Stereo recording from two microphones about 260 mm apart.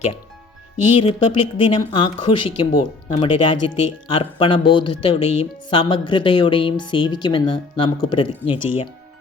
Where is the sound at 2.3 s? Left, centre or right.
Left.